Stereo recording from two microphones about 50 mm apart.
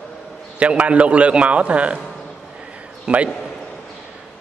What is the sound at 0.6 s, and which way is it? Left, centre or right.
A man's voice, right.